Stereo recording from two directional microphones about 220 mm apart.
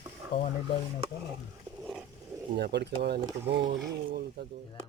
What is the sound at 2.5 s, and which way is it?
Speech, 50° right (ahead or behind).